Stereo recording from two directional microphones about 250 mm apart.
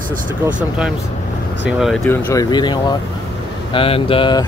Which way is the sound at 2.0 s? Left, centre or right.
Centre.